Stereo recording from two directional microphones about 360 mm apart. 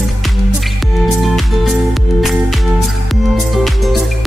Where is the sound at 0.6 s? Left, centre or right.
Centre.